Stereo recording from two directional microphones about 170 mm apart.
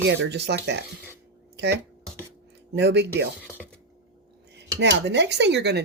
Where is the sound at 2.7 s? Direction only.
90° right.